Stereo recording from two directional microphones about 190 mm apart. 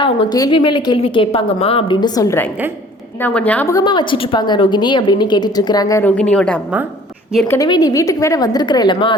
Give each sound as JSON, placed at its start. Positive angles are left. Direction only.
{"t": 0.0, "sound": "a woman's voice", "side_deg": 25}